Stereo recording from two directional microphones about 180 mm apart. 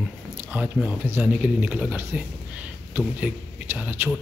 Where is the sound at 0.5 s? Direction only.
10° right (ahead or behind).